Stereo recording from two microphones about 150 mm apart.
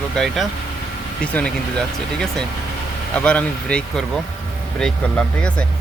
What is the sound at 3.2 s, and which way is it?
Speech, 5° left (ahead or behind).